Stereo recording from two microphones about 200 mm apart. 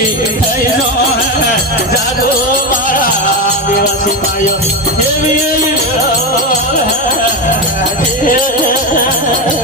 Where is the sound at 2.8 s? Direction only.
45° left (ahead or behind).